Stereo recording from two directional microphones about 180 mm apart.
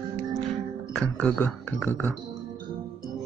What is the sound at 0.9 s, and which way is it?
Speech, 10° left (ahead or behind).